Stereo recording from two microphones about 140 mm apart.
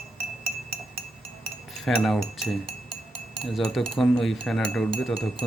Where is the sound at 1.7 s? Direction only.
Centre (ahead or behind).